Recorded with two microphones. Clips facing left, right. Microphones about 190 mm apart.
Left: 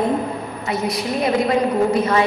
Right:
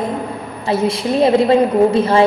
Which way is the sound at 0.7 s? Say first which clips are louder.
Right 6 dB; 25° right (ahead or behind).